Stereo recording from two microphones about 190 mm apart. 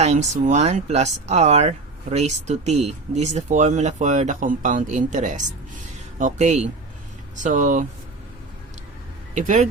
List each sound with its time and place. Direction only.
0.0 s speech: 35° right (ahead or behind)
9.3 s speech: 40° right (ahead or behind)